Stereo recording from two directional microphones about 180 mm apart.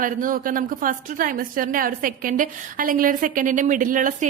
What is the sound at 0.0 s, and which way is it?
A woman's voice, 50° right (ahead or behind).